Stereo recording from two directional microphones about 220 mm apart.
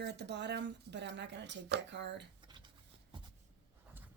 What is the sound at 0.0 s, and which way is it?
A woman's voice, 50° right (ahead or behind).